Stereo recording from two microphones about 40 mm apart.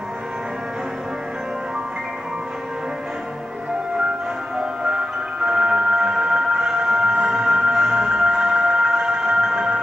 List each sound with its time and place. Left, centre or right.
4.8 s music: centre
7.2 s music: centre
7.5 s music: centre